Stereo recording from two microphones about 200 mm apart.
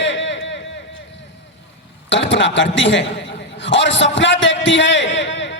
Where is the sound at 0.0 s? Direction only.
65° left (ahead or behind).